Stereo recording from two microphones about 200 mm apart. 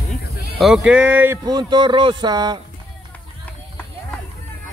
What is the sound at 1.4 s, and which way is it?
A man's voice, 20° right (ahead or behind).